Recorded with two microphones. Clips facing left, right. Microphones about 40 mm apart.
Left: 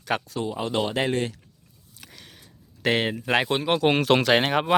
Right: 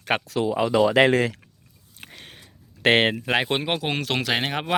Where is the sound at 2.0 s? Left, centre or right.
Right.